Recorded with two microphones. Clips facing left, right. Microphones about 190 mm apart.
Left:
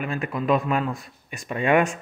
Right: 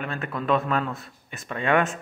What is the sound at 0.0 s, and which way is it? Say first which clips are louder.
Speech: left 3 dB; 10° left (ahead or behind).